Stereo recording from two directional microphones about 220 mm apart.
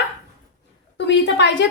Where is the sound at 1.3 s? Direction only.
55° left (ahead or behind).